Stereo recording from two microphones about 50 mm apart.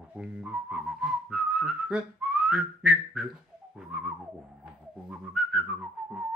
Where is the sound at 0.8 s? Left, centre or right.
Centre.